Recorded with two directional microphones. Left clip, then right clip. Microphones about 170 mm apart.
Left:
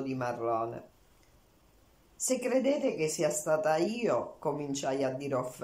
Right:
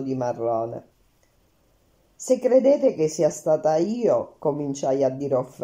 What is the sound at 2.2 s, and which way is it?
Speech, 40° right (ahead or behind).